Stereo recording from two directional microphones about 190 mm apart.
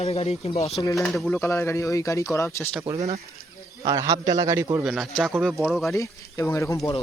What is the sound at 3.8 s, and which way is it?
Speech, 20° right (ahead or behind).